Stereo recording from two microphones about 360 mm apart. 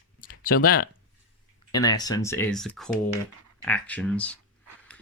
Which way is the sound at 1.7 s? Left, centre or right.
Centre.